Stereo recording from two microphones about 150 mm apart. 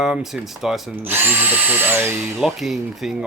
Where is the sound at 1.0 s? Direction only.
15° right (ahead or behind).